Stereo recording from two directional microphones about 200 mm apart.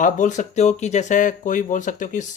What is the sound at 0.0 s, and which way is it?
Speech, 40° left (ahead or behind).